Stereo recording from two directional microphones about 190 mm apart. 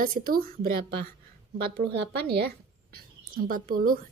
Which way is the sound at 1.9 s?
60° right (ahead or behind).